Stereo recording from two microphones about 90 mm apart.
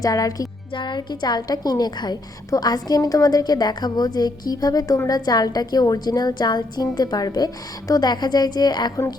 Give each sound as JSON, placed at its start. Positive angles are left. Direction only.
{"t": 0.0, "sound": "a woman's voice", "side_deg": 40}
{"t": 0.7, "sound": "a woman's voice", "side_deg": 60}